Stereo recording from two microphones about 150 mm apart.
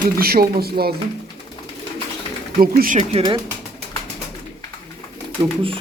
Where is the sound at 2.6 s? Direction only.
70° right (ahead or behind).